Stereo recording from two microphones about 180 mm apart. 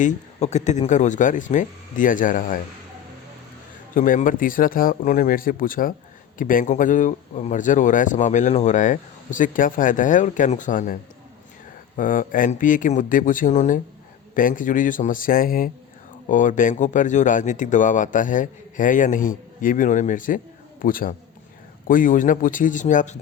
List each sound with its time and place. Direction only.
0.0 s speech: 40° left (ahead or behind)
3.9 s speech: 50° left (ahead or behind)
11.9 s speech: 50° left (ahead or behind)